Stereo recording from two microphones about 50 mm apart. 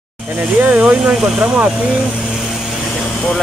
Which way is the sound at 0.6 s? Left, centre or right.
Right.